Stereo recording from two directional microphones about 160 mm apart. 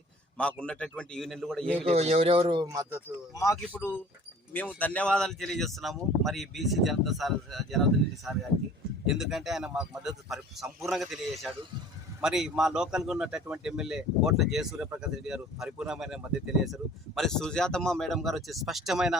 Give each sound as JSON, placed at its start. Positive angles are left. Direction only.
{"t": 0.3, "sound": "a man's voice", "side_deg": 5}
{"t": 1.8, "sound": "speech", "side_deg": -40}
{"t": 3.3, "sound": "a man's voice", "side_deg": 20}